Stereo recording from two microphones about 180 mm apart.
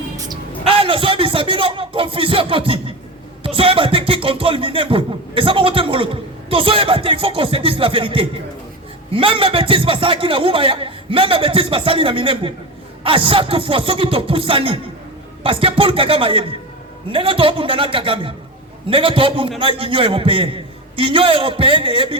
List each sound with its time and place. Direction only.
0.2 s a man's voice: 25° right (ahead or behind)